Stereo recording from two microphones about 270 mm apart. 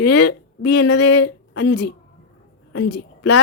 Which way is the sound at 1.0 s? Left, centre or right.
Left.